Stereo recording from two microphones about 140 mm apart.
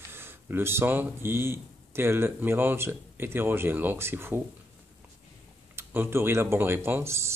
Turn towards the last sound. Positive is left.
turn(degrees=-20)  # may be behind; listen again after turning